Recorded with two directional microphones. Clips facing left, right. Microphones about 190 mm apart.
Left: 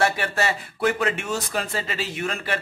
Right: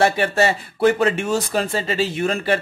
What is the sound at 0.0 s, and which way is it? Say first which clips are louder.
Speech: right 6 dB; 30° right (ahead or behind).